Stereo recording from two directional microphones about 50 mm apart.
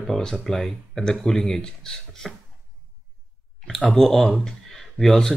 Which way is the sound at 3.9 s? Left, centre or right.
Centre.